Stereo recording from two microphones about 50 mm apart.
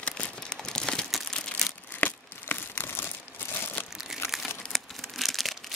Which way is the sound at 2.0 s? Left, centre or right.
Left.